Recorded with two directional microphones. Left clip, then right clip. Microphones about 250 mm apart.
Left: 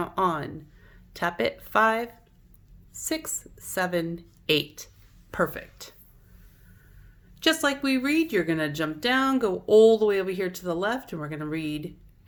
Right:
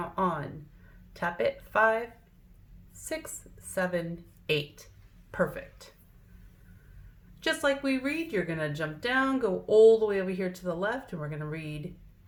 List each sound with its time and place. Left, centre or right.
0.0 s a woman's voice: left
7.3 s a woman's voice: left